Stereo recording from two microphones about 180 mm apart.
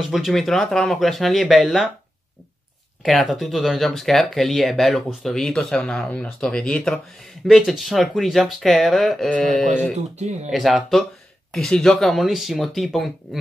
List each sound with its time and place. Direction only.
0.0 s speech: centre (ahead or behind)
3.0 s speech: centre (ahead or behind)
9.9 s speech: 40° right (ahead or behind)
10.5 s speech: centre (ahead or behind)